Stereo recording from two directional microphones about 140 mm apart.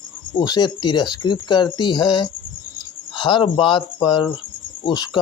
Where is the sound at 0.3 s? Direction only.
30° left (ahead or behind).